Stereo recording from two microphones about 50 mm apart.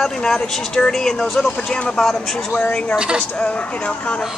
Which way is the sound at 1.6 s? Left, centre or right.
Centre.